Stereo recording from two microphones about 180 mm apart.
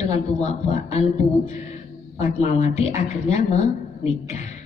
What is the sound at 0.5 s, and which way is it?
A man's voice, 35° left (ahead or behind).